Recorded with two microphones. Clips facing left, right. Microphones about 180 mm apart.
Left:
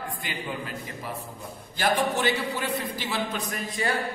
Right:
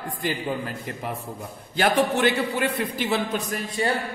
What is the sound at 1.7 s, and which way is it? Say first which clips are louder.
A man's voice: right 4 dB; 60° right (ahead or behind).